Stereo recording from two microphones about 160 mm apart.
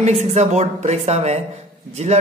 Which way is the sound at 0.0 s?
45° right (ahead or behind).